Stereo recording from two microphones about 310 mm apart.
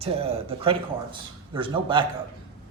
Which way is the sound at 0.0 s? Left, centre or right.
Centre.